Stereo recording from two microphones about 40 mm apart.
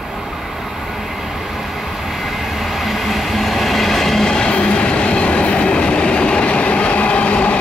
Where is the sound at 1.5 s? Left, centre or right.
Centre.